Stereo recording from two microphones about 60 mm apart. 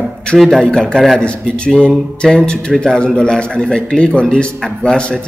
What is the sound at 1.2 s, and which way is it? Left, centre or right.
A man's voice, centre.